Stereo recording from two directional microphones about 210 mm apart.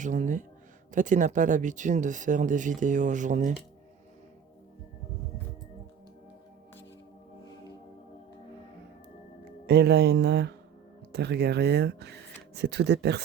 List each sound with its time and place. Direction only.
0.0 s speech: 35° right (ahead or behind)
9.6 s speech: 50° right (ahead or behind)